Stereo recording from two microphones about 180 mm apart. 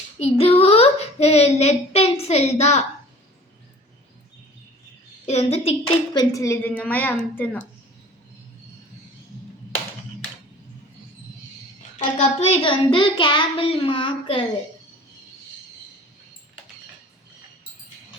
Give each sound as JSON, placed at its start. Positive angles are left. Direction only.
{"t": 0.2, "sound": "a child's voice", "side_deg": 30}
{"t": 5.2, "sound": "speech", "side_deg": 35}
{"t": 6.1, "sound": "a woman's voice", "side_deg": 20}
{"t": 11.9, "sound": "a child's voice", "side_deg": 35}